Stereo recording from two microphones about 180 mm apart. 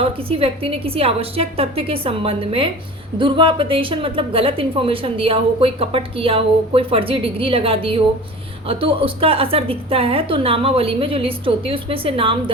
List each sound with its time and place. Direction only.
0.0 s a woman's voice: 30° right (ahead or behind)